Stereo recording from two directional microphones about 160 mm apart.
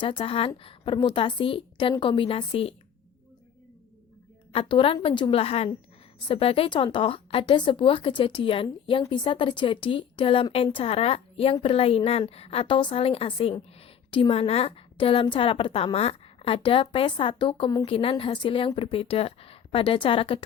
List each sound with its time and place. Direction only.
0.0 s a woman's voice: 35° left (ahead or behind)
4.5 s a woman's voice: 35° left (ahead or behind)